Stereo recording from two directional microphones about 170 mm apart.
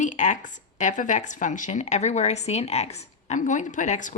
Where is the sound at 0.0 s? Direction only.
45° left (ahead or behind).